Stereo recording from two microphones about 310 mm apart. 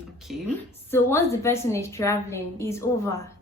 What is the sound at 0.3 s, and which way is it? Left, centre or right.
A woman's voice, centre.